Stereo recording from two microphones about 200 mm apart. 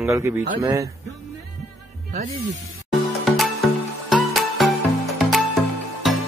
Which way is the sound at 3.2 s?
Centre (ahead or behind).